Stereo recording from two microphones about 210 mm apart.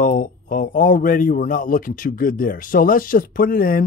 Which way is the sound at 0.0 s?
40° left (ahead or behind).